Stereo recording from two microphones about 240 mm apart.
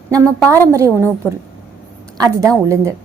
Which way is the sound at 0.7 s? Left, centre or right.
Centre.